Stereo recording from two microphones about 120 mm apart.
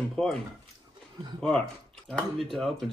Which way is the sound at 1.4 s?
5° left (ahead or behind).